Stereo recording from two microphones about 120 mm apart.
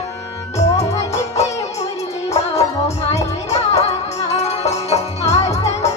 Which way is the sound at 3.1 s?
65° left (ahead or behind).